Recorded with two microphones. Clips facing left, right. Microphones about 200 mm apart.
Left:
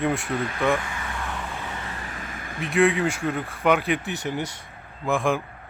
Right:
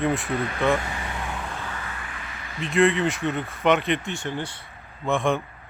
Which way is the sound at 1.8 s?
35° left (ahead or behind).